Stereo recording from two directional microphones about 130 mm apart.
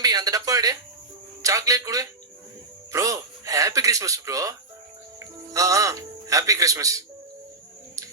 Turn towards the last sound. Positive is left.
turn(degrees=-25)  # may be behind; listen again after turning